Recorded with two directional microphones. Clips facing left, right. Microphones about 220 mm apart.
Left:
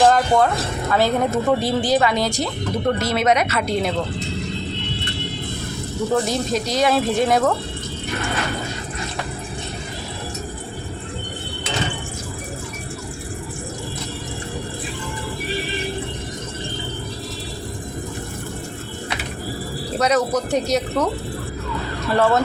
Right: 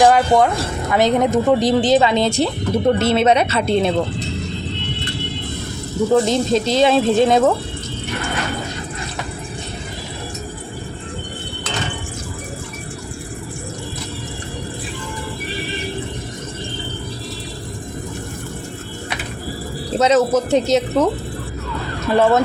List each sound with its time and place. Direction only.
0.0 s speech: 15° right (ahead or behind)
6.2 s speech: 25° right (ahead or behind)
20.0 s speech: 25° right (ahead or behind)
22.1 s speech: 20° right (ahead or behind)